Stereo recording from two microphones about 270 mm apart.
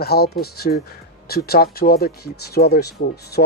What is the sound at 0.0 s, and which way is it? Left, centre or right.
Speech, left.